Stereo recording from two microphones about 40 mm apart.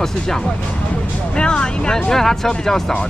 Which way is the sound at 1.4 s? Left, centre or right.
Left.